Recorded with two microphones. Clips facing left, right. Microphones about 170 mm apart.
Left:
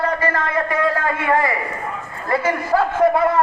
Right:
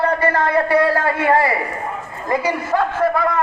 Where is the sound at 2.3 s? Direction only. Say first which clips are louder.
Even; 15° right (ahead or behind).